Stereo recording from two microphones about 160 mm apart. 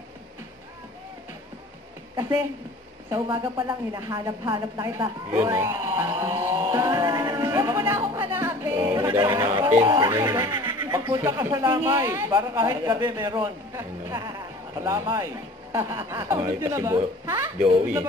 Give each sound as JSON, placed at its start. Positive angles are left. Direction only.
{"t": 2.1, "sound": "a woman's voice", "side_deg": -25}
{"t": 3.5, "sound": "a sound", "side_deg": -25}
{"t": 9.4, "sound": "speech", "side_deg": -15}